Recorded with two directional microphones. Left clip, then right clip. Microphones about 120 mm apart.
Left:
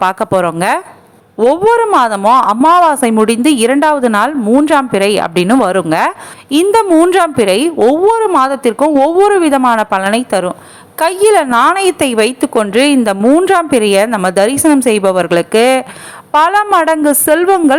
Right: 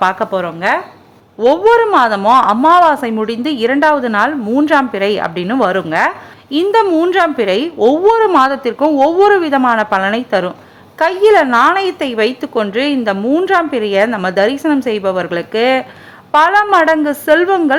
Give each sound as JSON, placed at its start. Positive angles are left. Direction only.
{"t": 0.0, "sound": "a woman's voice", "side_deg": 45}
{"t": 0.3, "sound": "a woman's voice", "side_deg": 80}
{"t": 1.4, "sound": "a woman's voice", "side_deg": 35}
{"t": 6.1, "sound": "a woman's voice", "side_deg": 35}
{"t": 10.9, "sound": "a woman's voice", "side_deg": 35}